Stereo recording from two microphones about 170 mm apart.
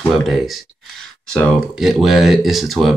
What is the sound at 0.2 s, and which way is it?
Speech, centre (ahead or behind).